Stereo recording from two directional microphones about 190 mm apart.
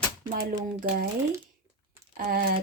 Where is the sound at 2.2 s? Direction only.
50° right (ahead or behind).